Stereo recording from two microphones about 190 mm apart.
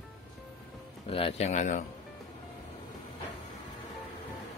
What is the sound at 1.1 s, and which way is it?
Speech, 30° left (ahead or behind).